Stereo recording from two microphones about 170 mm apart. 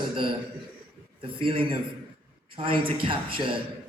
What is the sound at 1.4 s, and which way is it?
Speech, 30° right (ahead or behind).